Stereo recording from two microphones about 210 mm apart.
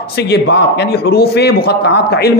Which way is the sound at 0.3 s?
50° left (ahead or behind).